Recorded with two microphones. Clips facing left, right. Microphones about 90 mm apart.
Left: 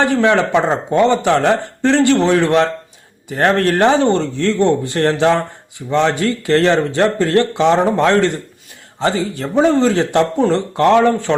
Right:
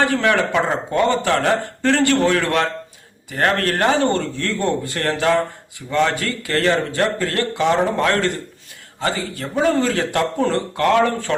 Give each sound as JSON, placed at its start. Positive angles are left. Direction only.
{"t": 0.0, "sound": "speech", "side_deg": 20}